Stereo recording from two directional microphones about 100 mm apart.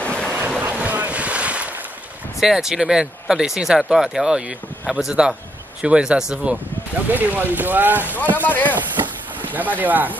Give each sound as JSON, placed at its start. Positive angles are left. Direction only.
{"t": 0.0, "sound": "boat", "side_deg": 10}
{"t": 0.6, "sound": "boat", "side_deg": -15}
{"t": 2.4, "sound": "speech", "side_deg": -5}
{"t": 8.0, "sound": "speech", "side_deg": 20}
{"t": 9.4, "sound": "speech", "side_deg": -15}